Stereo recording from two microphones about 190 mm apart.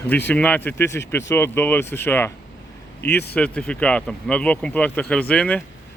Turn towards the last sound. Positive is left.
turn(degrees=5)  # may be behind; listen again after turning